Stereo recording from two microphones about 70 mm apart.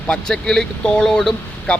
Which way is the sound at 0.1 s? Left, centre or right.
Centre.